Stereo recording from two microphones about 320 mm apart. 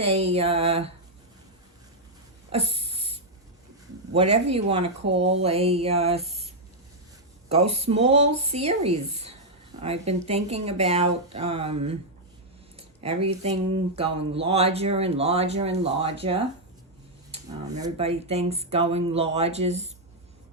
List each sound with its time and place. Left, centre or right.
0.0 s speech: centre
2.5 s a sound: centre
4.1 s speech: centre
7.5 s speech: centre
12.7 s a sound: centre
13.2 s speech: centre
17.3 s speech: centre